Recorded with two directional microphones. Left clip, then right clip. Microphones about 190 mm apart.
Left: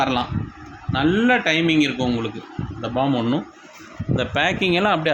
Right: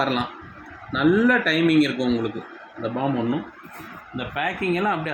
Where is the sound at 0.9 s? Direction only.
35° left (ahead or behind).